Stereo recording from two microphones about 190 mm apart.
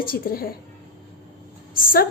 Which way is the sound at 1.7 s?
50° left (ahead or behind).